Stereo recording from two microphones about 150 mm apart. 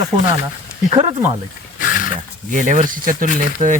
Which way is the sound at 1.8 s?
60° left (ahead or behind).